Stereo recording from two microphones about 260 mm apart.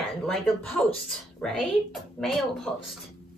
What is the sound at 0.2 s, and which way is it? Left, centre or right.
Speech, centre.